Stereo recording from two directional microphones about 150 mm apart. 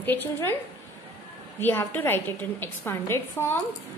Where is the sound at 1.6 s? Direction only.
15° left (ahead or behind).